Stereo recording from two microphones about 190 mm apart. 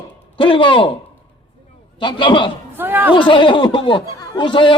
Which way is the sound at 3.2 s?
25° left (ahead or behind).